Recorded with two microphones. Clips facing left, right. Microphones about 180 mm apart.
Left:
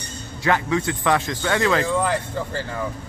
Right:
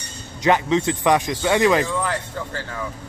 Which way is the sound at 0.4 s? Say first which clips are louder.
Right 3 dB; 20° right (ahead or behind).